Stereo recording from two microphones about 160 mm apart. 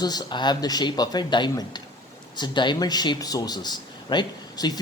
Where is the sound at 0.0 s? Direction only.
25° left (ahead or behind).